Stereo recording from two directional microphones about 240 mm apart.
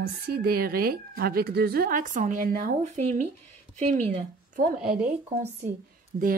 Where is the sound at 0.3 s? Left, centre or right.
Right.